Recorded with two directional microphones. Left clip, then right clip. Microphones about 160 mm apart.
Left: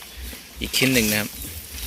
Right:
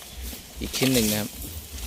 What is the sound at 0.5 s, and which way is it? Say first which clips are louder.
Speech: left 4 dB; 5° right (ahead or behind).